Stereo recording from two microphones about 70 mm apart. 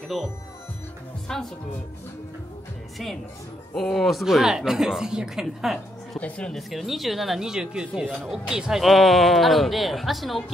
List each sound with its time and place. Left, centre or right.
1.3 s a woman's voice: centre
3.7 s speech: centre
6.1 s speech: centre
6.5 s speech: centre